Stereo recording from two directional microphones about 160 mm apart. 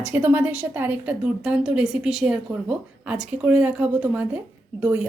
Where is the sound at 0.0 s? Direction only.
10° right (ahead or behind).